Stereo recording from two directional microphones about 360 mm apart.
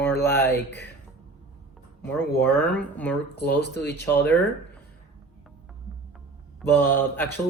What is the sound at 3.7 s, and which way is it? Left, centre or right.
Speech, left.